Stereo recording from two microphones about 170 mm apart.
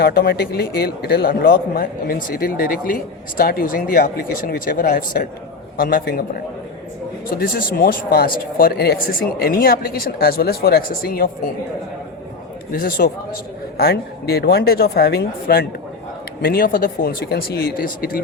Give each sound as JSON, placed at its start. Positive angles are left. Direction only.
{"t": 0.0, "sound": "a man's voice", "side_deg": 70}
{"t": 7.3, "sound": "a man's voice", "side_deg": 60}
{"t": 12.7, "sound": "a man's voice", "side_deg": 60}